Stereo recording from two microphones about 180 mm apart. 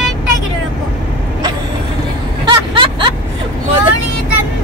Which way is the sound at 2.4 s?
30° right (ahead or behind).